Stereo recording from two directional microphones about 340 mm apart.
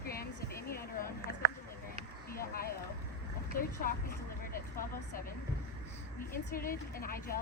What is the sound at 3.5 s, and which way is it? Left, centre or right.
Speech, left.